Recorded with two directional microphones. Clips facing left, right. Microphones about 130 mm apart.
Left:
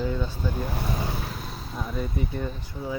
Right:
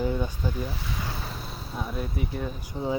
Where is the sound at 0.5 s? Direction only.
55° left (ahead or behind).